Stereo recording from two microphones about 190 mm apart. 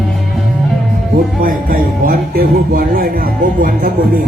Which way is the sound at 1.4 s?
45° right (ahead or behind).